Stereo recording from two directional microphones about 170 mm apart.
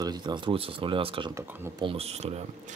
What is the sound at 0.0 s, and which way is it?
Speech, 25° right (ahead or behind).